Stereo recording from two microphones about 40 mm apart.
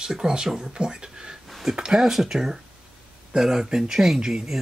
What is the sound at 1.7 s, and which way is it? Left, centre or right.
Speech, centre.